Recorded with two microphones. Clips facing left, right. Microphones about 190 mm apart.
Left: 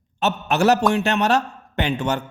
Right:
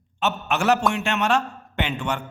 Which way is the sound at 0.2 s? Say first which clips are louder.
Left 4 dB; 40° left (ahead or behind).